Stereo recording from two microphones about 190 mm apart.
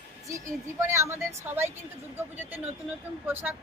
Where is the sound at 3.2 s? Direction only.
10° right (ahead or behind).